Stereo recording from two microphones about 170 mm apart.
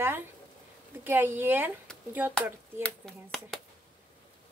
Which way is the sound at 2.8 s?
5° left (ahead or behind).